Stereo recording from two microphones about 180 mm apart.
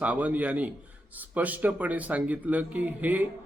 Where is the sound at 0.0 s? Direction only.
10° right (ahead or behind).